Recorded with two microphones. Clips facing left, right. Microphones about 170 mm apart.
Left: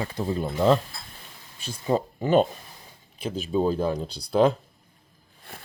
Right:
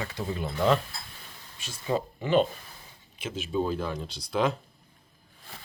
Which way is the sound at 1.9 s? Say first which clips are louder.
Left 4 dB; 40° left (ahead or behind).